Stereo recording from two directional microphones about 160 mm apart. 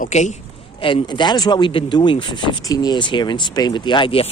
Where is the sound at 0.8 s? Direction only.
35° left (ahead or behind).